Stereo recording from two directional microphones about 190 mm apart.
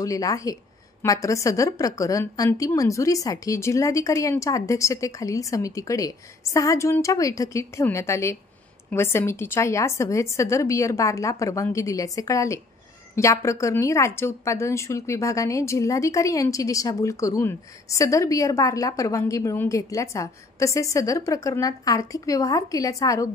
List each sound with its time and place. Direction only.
0.0 s a woman's voice: 20° left (ahead or behind)